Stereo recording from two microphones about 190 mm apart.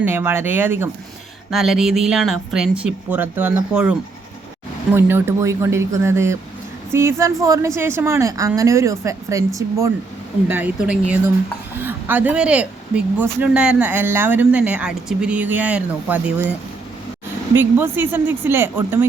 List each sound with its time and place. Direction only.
0.0 s speech: 10° right (ahead or behind)
4.9 s speech: 10° right (ahead or behind)
17.5 s speech: 10° right (ahead or behind)